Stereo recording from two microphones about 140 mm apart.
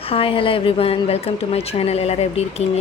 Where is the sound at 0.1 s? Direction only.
40° left (ahead or behind).